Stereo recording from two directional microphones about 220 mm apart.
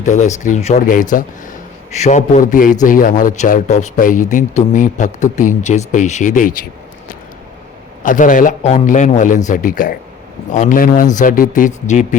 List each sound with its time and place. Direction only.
0.0 s speech: 30° left (ahead or behind)
8.0 s speech: 35° left (ahead or behind)